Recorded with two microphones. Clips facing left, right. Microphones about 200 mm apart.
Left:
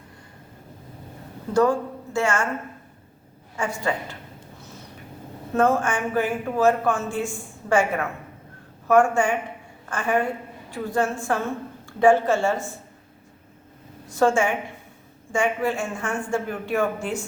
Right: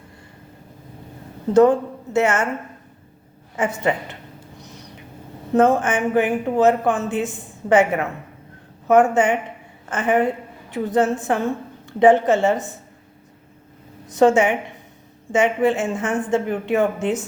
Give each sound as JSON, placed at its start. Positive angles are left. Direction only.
{"t": 1.5, "sound": "a woman's voice", "side_deg": -20}
{"t": 3.6, "sound": "speech", "side_deg": -20}
{"t": 5.5, "sound": "speech", "side_deg": -20}
{"t": 14.1, "sound": "speech", "side_deg": -20}